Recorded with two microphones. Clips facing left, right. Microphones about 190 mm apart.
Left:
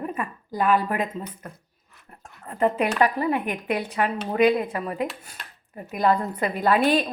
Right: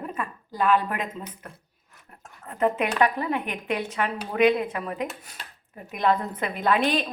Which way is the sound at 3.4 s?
45° left (ahead or behind).